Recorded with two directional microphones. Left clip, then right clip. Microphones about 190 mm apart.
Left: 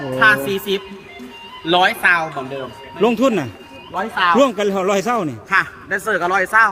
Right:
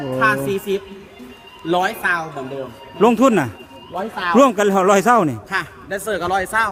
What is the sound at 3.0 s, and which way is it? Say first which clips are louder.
Speech: right 2 dB; 20° right (ahead or behind).